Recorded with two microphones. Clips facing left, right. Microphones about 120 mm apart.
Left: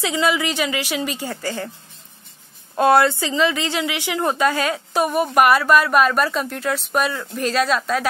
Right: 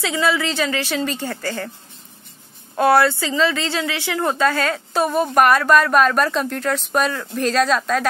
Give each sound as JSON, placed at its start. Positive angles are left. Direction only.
{"t": 0.0, "sound": "a woman's voice", "side_deg": 15}
{"t": 2.8, "sound": "a woman's voice", "side_deg": 20}